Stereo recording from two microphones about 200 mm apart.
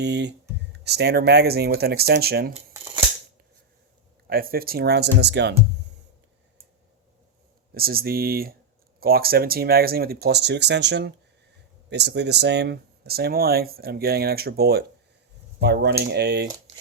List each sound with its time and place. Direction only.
0.0 s speech: 60° right (ahead or behind)
4.3 s speech: 50° right (ahead or behind)
7.7 s speech: 50° right (ahead or behind)